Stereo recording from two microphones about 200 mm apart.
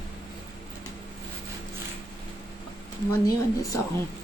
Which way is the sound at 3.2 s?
15° left (ahead or behind).